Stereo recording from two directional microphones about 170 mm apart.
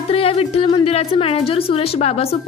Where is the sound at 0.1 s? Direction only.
35° left (ahead or behind).